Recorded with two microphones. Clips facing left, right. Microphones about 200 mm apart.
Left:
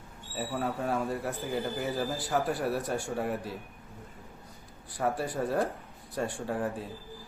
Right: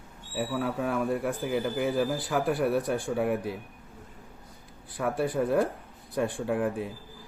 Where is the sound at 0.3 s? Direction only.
65° right (ahead or behind).